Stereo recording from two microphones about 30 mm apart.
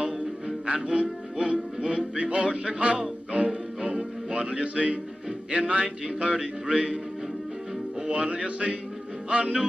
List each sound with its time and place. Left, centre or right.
0.7 s music: right
8.1 s music: right